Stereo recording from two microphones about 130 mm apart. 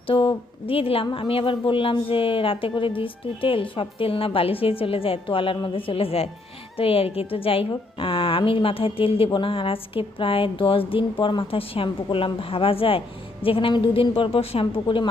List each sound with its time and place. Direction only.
0.1 s a woman's voice: 45° left (ahead or behind)